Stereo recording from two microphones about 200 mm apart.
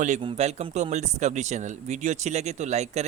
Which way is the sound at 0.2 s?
30° right (ahead or behind).